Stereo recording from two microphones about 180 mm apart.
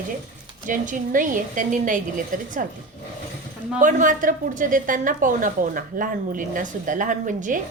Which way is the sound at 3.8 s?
45° right (ahead or behind).